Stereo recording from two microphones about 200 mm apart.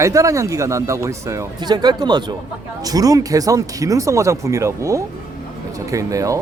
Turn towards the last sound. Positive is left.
turn(degrees=-15)  # may be behind; listen again after turning